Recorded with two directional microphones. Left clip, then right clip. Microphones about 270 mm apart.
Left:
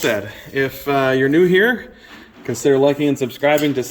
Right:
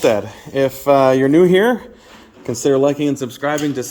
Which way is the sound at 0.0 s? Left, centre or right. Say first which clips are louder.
Right 4 dB; right.